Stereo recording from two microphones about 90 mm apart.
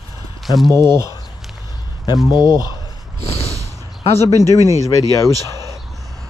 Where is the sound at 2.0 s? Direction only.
50° left (ahead or behind).